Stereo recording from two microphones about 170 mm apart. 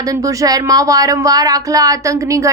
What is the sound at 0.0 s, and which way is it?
A woman's voice, 20° right (ahead or behind).